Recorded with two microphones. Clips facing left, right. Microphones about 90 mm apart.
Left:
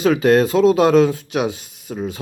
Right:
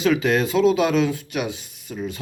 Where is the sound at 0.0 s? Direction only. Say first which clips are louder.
Left 5 dB; 45° left (ahead or behind).